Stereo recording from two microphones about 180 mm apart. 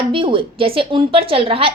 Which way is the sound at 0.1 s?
30° right (ahead or behind).